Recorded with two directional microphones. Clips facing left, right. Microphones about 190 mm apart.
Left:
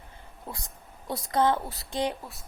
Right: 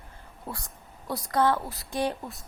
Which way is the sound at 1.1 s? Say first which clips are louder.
Even; 20° left (ahead or behind).